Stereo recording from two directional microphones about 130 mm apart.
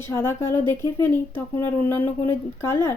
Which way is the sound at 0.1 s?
20° left (ahead or behind).